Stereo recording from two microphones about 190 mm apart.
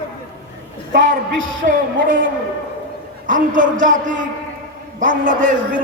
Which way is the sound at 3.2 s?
45° right (ahead or behind).